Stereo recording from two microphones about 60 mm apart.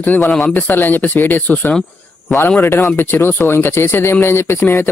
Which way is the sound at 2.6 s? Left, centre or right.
Left.